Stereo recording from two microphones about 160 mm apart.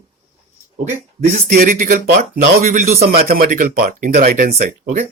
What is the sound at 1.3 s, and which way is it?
Speech, 60° right (ahead or behind).